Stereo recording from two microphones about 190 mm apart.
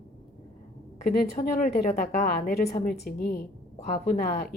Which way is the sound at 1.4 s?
50° left (ahead or behind).